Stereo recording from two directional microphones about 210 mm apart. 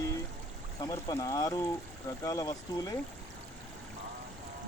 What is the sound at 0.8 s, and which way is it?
Speech, 15° left (ahead or behind).